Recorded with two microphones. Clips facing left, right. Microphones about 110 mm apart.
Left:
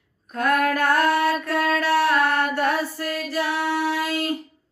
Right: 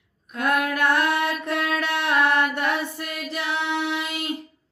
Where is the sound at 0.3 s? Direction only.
40° left (ahead or behind).